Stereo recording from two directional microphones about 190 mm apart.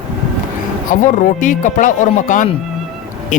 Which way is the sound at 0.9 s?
45° left (ahead or behind).